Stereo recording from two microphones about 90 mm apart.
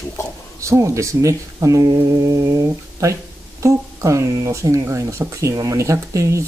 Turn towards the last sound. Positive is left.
turn(degrees=-35)  # may be behind; listen again after turning